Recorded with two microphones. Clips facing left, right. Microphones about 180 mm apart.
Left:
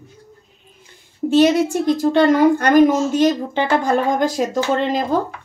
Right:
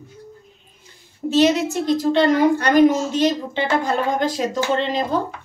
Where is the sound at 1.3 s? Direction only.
50° left (ahead or behind).